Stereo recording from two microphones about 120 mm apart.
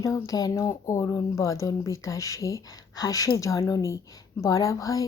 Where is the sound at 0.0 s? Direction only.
25° left (ahead or behind).